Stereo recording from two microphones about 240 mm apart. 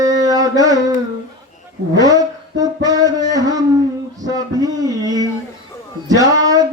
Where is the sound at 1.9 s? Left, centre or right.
Centre.